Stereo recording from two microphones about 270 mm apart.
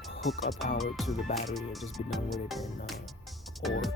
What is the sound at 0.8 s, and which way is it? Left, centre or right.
Speech, centre.